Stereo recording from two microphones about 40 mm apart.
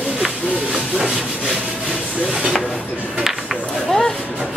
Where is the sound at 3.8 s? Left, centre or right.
Centre.